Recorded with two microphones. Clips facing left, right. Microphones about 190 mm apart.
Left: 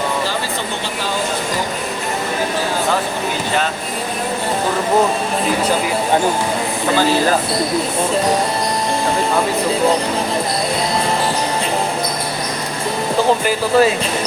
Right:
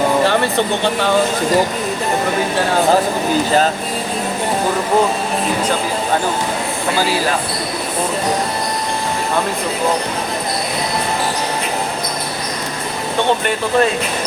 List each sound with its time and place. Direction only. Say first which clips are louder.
13.1 s speech: left 1 dB; centre (ahead or behind)